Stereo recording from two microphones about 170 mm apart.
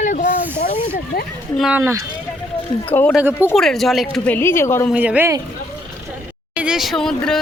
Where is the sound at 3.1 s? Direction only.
10° right (ahead or behind).